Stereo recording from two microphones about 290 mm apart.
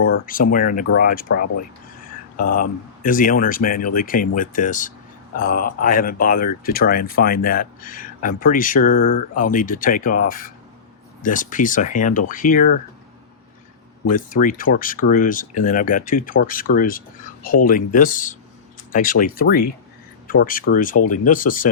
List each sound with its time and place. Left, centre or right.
0.0 s a sound: left
0.5 s speech: left
14.1 s speech: left